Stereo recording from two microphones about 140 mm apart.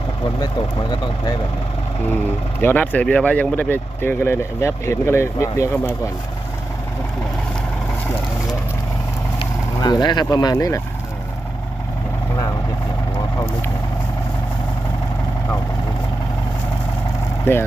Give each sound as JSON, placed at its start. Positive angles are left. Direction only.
{"t": 0.3, "sound": "speech", "side_deg": 30}
{"t": 2.6, "sound": "speech", "side_deg": 15}
{"t": 9.8, "sound": "speech", "side_deg": 30}
{"t": 17.4, "sound": "speech", "side_deg": 15}